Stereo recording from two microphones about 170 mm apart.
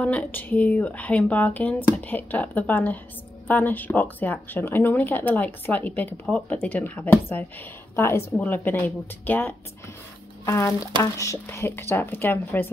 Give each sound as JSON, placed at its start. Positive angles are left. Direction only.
{"t": 0.0, "sound": "speech", "side_deg": 10}